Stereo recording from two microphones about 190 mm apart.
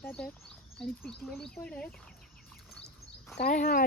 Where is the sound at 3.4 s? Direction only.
45° left (ahead or behind).